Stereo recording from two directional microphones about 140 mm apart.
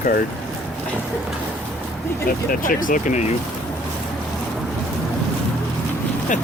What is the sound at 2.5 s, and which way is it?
Speech, 85° left.